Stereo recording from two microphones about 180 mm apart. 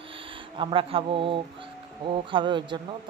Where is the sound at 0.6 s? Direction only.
30° right (ahead or behind).